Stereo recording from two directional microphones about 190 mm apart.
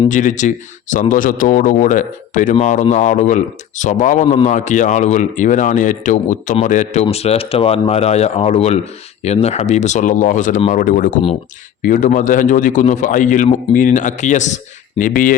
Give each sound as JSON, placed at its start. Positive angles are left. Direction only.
{"t": 0.1, "sound": "a man's voice", "side_deg": 40}